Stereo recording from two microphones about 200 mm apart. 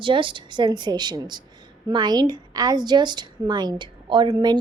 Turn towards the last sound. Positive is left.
turn(degrees=-20)  # may be behind; listen again after turning